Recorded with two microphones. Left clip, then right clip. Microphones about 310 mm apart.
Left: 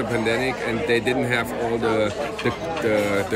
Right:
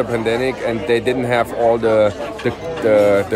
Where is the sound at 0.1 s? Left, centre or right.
Centre.